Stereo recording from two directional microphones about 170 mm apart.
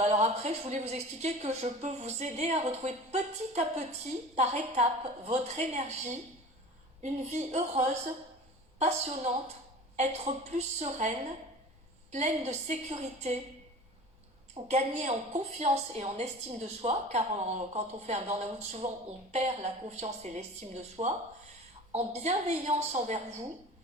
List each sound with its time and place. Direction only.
0.0 s speech: 40° right (ahead or behind)
12.1 s speech: 40° right (ahead or behind)
14.5 s speech: 40° right (ahead or behind)